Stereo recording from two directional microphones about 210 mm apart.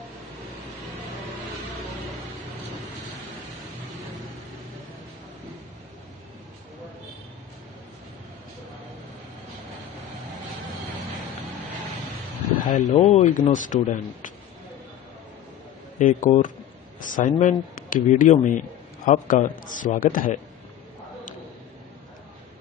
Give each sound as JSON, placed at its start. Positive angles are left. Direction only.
{"t": 12.6, "sound": "speech", "side_deg": 35}
{"t": 16.0, "sound": "speech", "side_deg": 40}